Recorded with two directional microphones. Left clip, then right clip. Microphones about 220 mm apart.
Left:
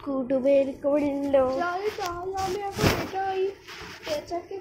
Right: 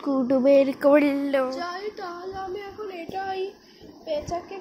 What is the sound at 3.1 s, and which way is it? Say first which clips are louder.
Speech: left 2 dB; 45° right (ahead or behind).